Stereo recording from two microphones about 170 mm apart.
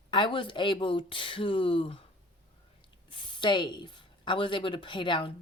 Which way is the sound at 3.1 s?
30° left (ahead or behind).